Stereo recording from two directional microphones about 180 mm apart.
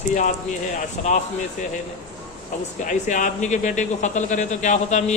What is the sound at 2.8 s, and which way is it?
A man's voice, 45° left (ahead or behind).